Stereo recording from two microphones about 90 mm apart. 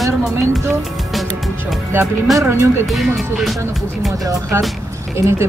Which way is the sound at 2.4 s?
30° right (ahead or behind).